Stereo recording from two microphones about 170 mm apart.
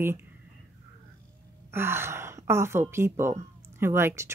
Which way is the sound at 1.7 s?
15° right (ahead or behind).